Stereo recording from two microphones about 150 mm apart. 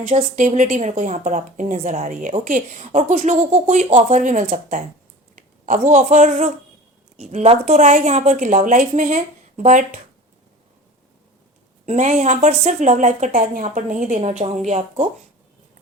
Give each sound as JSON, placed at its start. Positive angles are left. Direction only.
{"t": 0.1, "sound": "a woman's voice", "side_deg": -55}
{"t": 11.9, "sound": "speech", "side_deg": -55}